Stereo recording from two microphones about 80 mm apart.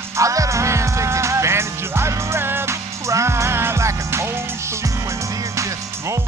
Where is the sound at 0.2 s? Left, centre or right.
Right.